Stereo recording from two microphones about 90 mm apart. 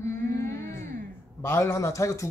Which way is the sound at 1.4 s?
30° left (ahead or behind).